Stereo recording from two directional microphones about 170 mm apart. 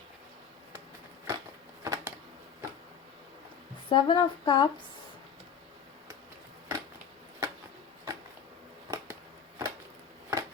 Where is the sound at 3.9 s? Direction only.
30° left (ahead or behind).